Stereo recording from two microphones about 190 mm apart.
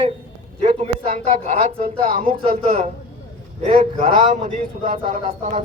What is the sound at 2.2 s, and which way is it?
Speech, 35° right (ahead or behind).